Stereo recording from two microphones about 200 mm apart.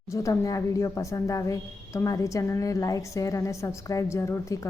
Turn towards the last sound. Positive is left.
turn(degrees=15)  # may be behind; listen again after turning